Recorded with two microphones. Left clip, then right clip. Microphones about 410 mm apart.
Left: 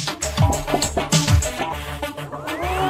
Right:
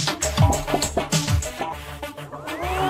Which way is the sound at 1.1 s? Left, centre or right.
Left.